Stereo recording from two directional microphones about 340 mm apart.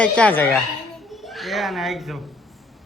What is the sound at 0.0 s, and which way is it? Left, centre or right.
A woman's voice, centre.